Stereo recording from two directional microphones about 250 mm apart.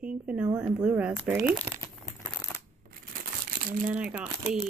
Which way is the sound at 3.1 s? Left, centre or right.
Right.